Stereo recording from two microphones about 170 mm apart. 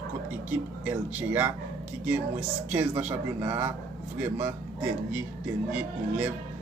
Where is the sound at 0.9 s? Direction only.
10° right (ahead or behind).